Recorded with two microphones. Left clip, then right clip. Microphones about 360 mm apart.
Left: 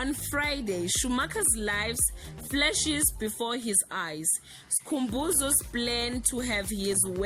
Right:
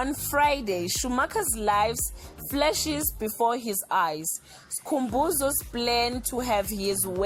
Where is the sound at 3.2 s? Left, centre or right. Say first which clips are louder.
Right 6 dB; right.